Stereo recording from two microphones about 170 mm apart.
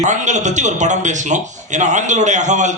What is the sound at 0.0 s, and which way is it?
A man's voice, 45° right (ahead or behind).